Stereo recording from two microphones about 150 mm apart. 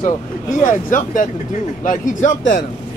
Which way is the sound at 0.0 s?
60° left (ahead or behind).